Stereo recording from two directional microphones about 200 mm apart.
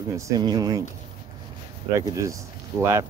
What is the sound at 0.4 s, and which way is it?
Speech, 20° right (ahead or behind).